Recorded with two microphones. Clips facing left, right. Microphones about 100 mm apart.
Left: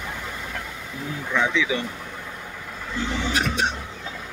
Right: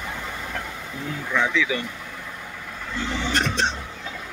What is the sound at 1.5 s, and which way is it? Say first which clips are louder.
Speech: even; 20° left (ahead or behind).